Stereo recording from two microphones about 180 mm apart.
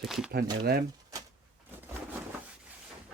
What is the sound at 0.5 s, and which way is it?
Speech, 60° right (ahead or behind).